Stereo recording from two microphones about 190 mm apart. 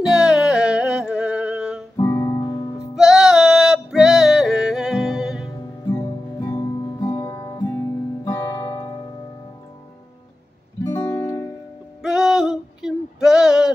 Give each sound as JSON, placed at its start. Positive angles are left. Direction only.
{"t": 0.1, "sound": "music", "side_deg": -5}
{"t": 2.0, "sound": "music", "side_deg": 15}
{"t": 3.0, "sound": "music", "side_deg": -5}
{"t": 5.5, "sound": "music", "side_deg": 15}
{"t": 10.9, "sound": "music", "side_deg": 15}
{"t": 12.0, "sound": "music", "side_deg": -5}